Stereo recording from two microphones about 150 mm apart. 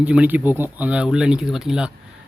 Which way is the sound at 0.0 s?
10° right (ahead or behind).